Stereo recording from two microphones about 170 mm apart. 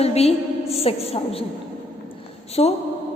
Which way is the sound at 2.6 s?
40° left (ahead or behind).